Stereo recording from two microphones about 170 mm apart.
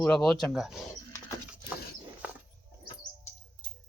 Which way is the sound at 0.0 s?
Centre (ahead or behind).